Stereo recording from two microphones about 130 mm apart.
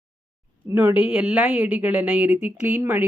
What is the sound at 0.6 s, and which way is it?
Speech, 15° right (ahead or behind).